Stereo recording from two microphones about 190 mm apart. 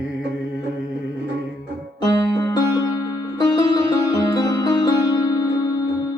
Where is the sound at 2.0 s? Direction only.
20° left (ahead or behind).